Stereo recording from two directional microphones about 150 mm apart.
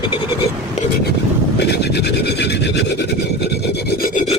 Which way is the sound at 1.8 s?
90° left.